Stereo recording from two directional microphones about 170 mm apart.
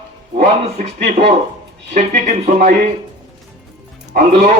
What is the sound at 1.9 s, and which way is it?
Speech, 45° right (ahead or behind).